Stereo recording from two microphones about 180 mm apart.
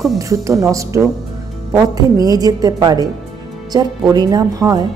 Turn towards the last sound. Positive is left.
turn(degrees=-20)  # may be behind; listen again after turning